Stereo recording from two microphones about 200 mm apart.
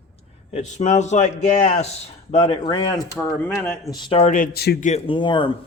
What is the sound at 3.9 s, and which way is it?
Speech, 25° left (ahead or behind).